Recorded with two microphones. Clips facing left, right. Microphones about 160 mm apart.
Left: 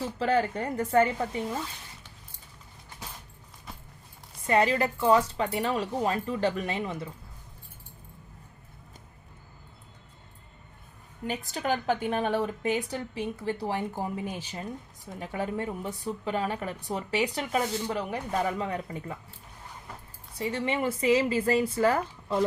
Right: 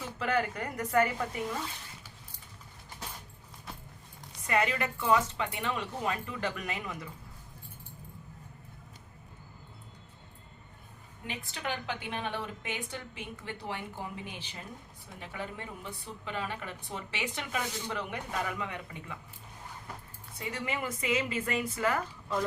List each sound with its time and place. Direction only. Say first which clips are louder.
0.0 s speech: left 5 dB; 30° left (ahead or behind)
3.7 s keys jangling: even; centre (ahead or behind)
4.4 s speech: left 6 dB; 30° left (ahead or behind)
11.3 s speech: left 8 dB; 40° left (ahead or behind)
20.4 s speech: left 7 dB; 30° left (ahead or behind)